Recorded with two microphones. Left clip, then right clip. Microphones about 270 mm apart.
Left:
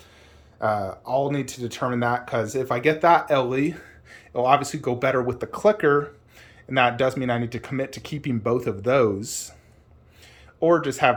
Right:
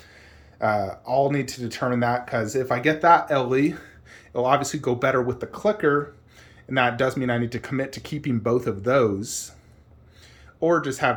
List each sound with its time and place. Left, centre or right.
0.7 s speech: left
1.0 s speech: centre
10.6 s speech: centre